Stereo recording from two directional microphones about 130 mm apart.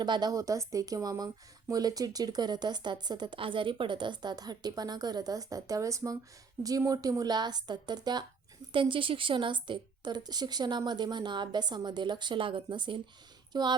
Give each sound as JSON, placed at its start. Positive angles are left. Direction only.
{"t": 0.0, "sound": "a woman's voice", "side_deg": -35}